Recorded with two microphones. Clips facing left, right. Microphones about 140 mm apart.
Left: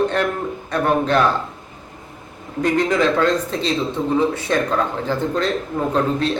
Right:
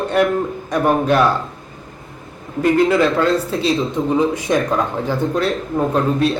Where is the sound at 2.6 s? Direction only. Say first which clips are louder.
Right 3 dB; 5° right (ahead or behind).